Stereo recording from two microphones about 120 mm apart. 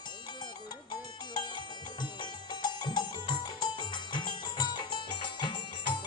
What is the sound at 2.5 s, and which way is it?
Music, 40° left (ahead or behind).